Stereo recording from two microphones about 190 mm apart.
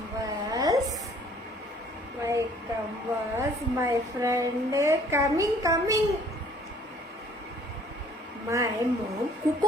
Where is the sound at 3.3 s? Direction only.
15° right (ahead or behind).